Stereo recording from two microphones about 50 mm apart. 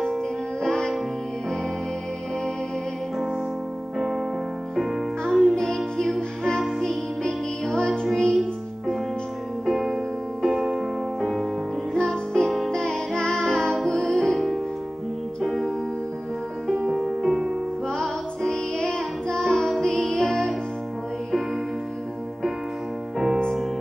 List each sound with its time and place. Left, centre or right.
0.0 s music: centre
5.3 s music: centre
9.7 s music: centre
11.9 s music: centre
16.9 s music: centre
17.8 s music: centre
23.1 s music: centre